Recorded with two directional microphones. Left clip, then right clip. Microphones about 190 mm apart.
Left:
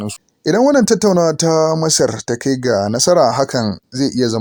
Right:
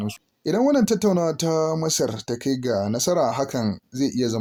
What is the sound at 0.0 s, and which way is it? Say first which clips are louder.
Speech: left 8 dB; 35° left (ahead or behind).